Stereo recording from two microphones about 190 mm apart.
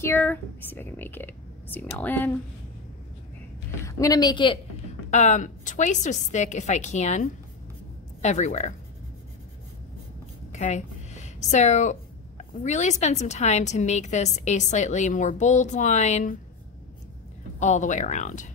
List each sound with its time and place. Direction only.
0.0 s a woman's voice: 10° left (ahead or behind)
3.8 s speech: 20° left (ahead or behind)
5.1 s speech: 40° left (ahead or behind)
10.5 s speech: 40° left (ahead or behind)
17.6 s speech: 40° left (ahead or behind)